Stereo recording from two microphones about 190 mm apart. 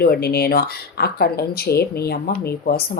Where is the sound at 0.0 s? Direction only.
55° left (ahead or behind).